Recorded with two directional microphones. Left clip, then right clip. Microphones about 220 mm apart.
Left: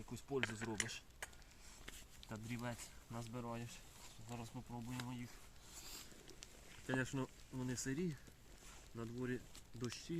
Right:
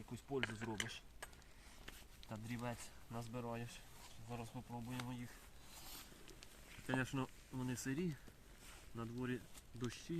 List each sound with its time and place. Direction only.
0.1 s speech: 10° left (ahead or behind)
1.9 s speech: centre (ahead or behind)
4.3 s speech: 20° right (ahead or behind)
6.8 s speech: 25° right (ahead or behind)